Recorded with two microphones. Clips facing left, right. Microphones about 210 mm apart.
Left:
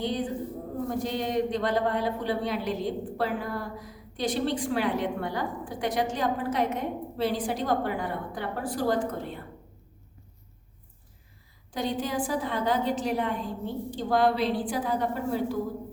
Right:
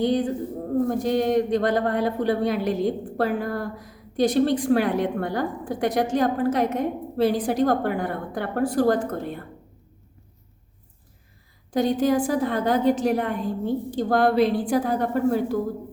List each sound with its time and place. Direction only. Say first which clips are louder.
0.0 s a woman's voice: right 7 dB; 45° right (ahead or behind)
11.7 s a woman's voice: right 9 dB; 45° right (ahead or behind)